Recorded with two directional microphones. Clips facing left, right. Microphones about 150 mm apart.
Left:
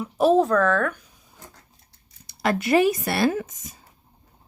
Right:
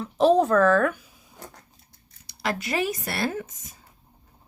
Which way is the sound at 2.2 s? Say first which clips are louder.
Left 5 dB; 55° left (ahead or behind).